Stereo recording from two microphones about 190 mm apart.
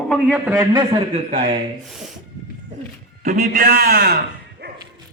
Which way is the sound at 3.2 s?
50° right (ahead or behind).